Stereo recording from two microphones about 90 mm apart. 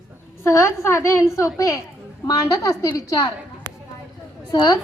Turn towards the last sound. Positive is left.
turn(degrees=45)  # may be behind; listen again after turning